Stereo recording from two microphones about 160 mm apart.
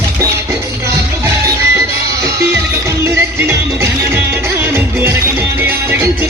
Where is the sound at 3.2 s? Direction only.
15° right (ahead or behind).